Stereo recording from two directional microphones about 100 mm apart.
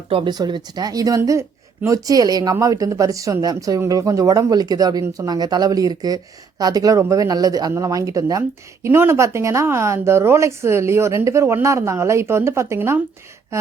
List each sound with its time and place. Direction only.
0.3 s speech: 45° right (ahead or behind); by 13.7 s 30° right (ahead or behind)